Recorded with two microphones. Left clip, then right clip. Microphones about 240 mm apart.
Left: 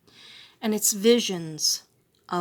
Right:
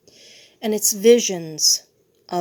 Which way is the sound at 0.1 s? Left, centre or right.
Centre.